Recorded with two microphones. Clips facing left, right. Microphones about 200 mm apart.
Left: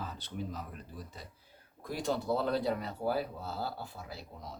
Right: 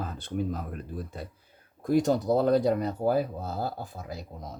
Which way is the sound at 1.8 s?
45° right (ahead or behind).